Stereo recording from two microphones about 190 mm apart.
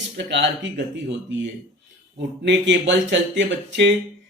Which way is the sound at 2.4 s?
70° right (ahead or behind).